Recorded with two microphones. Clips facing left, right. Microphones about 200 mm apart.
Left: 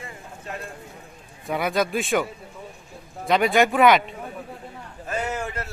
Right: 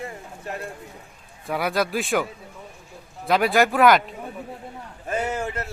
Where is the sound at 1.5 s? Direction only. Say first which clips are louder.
Even; centre (ahead or behind).